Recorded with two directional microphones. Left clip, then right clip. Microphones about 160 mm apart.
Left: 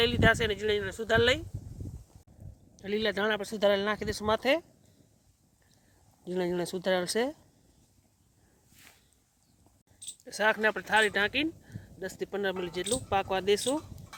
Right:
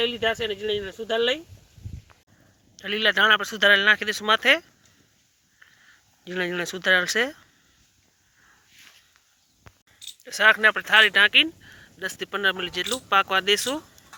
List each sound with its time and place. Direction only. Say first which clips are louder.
0.0 s speech: right 1 dB; 5° right (ahead or behind)
2.7 s speech: right 9 dB; 10° left (ahead or behind)
6.2 s speech: right 4 dB; 15° left (ahead or behind)
10.0 s speech: right 9 dB; 15° left (ahead or behind)